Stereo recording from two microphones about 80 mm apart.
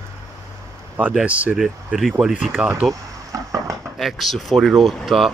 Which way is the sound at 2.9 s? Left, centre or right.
Right.